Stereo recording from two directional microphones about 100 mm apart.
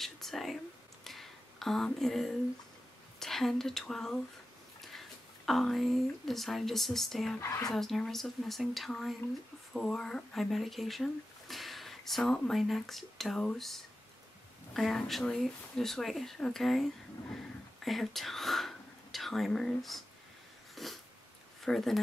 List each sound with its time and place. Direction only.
0.0 s speech: 5° left (ahead or behind)
1.0 s a sound: centre (ahead or behind)
3.2 s speech: 5° left (ahead or behind)
7.3 s speech: 30° left (ahead or behind)
7.7 s speech: 5° left (ahead or behind)
20.7 s dog: centre (ahead or behind)
21.6 s speech: 5° left (ahead or behind)